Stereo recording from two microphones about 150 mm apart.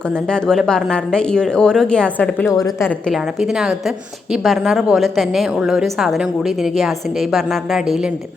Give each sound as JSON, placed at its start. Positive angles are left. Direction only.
{"t": 0.3, "sound": "a woman's voice", "side_deg": 5}
{"t": 2.5, "sound": "a woman's voice", "side_deg": 20}
{"t": 3.1, "sound": "a woman's voice", "side_deg": 0}